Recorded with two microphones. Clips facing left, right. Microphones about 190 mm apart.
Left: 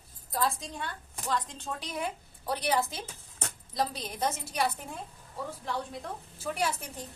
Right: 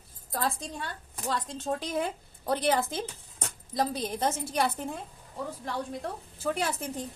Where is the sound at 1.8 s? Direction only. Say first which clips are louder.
Right 4 dB; 55° right (ahead or behind).